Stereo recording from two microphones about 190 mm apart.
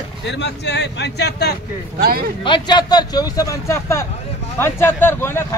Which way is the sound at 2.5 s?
25° left (ahead or behind).